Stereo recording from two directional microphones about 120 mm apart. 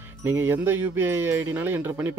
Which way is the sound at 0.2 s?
20° right (ahead or behind).